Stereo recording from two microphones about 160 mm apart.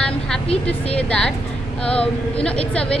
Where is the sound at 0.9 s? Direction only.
5° left (ahead or behind).